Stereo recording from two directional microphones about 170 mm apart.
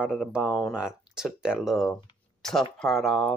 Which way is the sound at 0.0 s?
5° right (ahead or behind).